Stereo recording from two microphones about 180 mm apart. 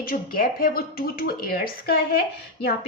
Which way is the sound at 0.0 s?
55° left (ahead or behind).